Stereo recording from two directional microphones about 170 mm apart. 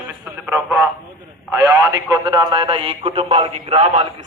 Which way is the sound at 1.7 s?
20° right (ahead or behind).